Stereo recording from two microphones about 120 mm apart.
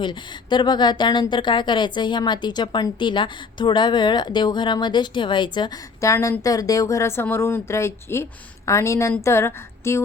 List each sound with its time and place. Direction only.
0.0 s a woman's voice: 40° left (ahead or behind)
6.0 s speech: 25° left (ahead or behind)